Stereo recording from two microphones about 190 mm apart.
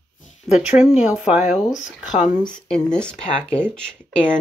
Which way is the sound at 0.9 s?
5° right (ahead or behind).